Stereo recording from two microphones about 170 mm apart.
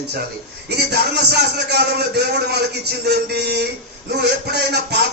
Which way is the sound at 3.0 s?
70° right (ahead or behind).